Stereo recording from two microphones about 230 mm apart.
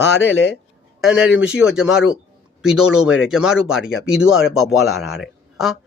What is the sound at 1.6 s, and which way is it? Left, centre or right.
A man's voice, centre.